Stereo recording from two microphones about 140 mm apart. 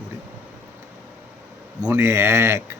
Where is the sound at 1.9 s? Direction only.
15° right (ahead or behind).